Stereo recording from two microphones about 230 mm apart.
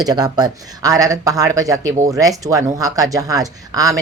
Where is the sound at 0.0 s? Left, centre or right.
Centre.